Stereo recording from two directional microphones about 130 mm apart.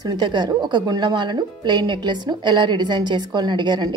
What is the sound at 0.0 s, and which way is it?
A woman's voice, 35° right (ahead or behind).